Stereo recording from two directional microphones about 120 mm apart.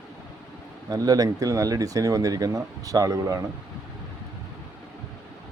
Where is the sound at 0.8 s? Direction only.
30° right (ahead or behind).